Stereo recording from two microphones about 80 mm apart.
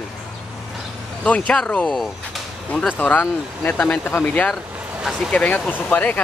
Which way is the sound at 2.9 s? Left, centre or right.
Left.